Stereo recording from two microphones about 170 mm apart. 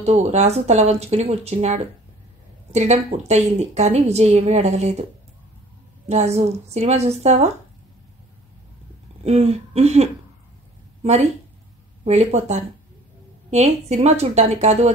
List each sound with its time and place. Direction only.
0.0 s a woman's voice: 40° right (ahead or behind)
6.0 s a woman's voice: 40° right (ahead or behind)
9.2 s a woman's voice: 40° right (ahead or behind)